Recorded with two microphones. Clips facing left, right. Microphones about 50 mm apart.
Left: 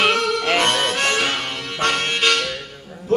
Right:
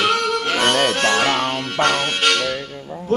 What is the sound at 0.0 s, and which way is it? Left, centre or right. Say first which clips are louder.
Music: even; left.